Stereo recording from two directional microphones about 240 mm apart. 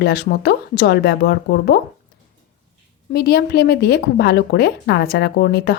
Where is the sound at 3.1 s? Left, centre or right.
Left.